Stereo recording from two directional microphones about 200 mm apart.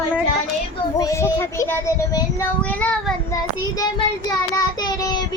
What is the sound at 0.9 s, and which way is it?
Speech, 15° left (ahead or behind).